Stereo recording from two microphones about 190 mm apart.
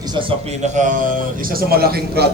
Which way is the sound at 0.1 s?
25° right (ahead or behind).